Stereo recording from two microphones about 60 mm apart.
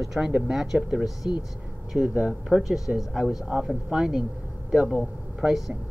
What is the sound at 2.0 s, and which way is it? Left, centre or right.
Speech, centre.